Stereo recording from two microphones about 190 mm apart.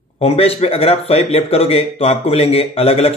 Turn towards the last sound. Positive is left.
turn(degrees=30)  # may be behind; listen again after turning